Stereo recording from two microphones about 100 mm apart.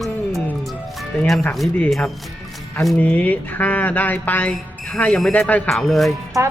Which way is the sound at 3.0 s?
15° left (ahead or behind).